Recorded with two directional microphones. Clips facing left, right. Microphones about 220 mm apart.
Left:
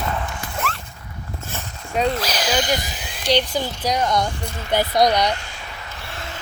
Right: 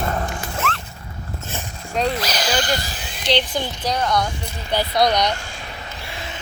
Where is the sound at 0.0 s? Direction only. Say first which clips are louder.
Right 2 dB; 40° right (ahead or behind).